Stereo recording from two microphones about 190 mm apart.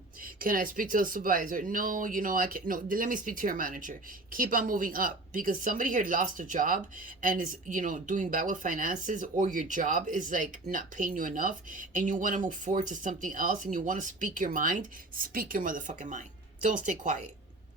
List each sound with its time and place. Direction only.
0.3 s speech: 45° right (ahead or behind)